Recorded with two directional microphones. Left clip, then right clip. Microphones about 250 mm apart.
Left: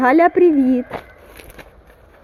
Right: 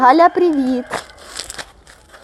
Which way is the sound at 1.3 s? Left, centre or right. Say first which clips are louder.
Right 10 dB; right.